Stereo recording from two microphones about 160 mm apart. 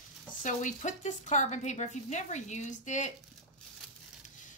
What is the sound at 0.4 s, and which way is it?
A woman's voice, 50° left (ahead or behind).